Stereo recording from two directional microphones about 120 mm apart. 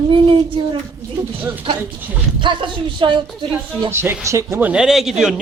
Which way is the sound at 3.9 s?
20° right (ahead or behind).